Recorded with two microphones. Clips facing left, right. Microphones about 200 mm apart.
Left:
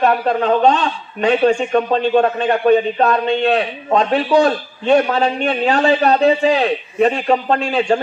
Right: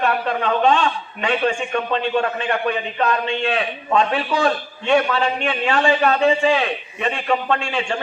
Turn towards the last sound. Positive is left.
turn(degrees=40)  # may be behind; listen again after turning